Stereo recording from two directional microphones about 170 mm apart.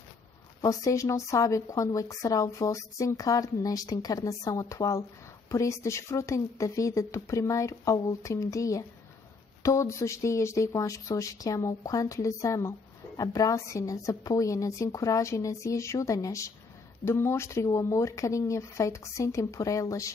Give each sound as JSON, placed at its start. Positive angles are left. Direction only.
{"t": 0.6, "sound": "speech", "side_deg": 20}